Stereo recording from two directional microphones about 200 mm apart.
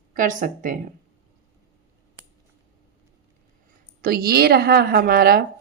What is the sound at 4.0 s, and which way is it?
A woman's voice, 45° right (ahead or behind).